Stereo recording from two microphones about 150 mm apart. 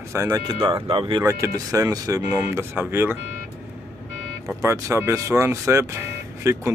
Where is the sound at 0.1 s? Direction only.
20° right (ahead or behind).